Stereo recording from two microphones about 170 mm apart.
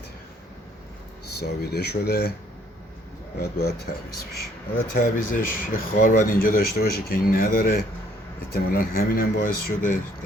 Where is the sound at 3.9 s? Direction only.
55° left (ahead or behind).